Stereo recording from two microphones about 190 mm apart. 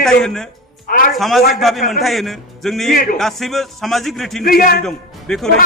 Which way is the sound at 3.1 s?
Centre (ahead or behind).